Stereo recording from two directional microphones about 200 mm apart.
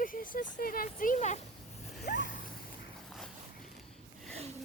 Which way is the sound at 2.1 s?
40° left (ahead or behind).